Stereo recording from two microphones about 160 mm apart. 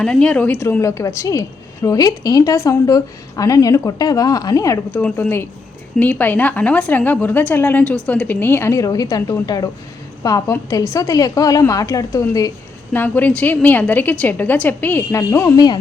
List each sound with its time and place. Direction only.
0.0 s a woman's voice: 5° left (ahead or behind); by 15.8 s 25° left (ahead or behind)